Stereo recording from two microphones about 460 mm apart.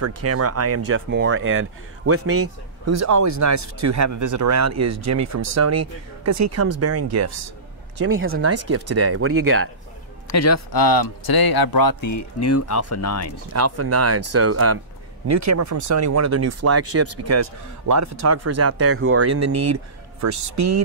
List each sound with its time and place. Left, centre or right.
0.0 s speech: right
10.2 s speech: left
13.5 s speech: right